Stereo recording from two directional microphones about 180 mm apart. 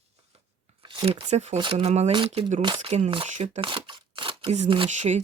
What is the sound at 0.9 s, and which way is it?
Speech, 25° right (ahead or behind).